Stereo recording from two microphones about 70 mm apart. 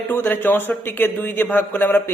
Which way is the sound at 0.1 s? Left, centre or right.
Left.